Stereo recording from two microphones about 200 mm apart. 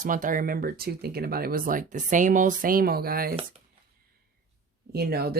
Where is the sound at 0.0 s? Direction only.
40° right (ahead or behind).